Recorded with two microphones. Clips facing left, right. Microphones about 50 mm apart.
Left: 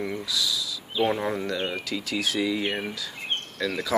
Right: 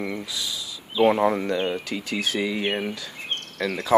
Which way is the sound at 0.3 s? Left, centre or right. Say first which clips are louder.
Left 3 dB; right.